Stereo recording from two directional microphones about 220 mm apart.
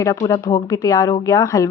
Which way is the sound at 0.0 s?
15° left (ahead or behind).